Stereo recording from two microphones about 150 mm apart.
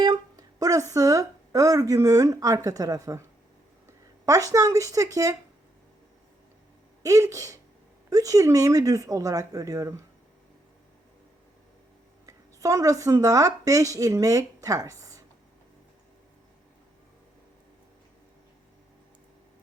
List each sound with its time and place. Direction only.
0.0 s speech: 25° right (ahead or behind)
4.3 s speech: 25° right (ahead or behind)
7.0 s speech: 20° right (ahead or behind)
12.2 s a woman's voice: 20° right (ahead or behind)